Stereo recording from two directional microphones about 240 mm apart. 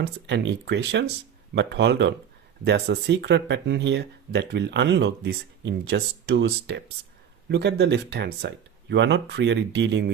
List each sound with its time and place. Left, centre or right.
0.0 s speech: right